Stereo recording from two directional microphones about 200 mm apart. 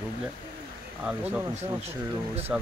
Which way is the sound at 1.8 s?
30° right (ahead or behind).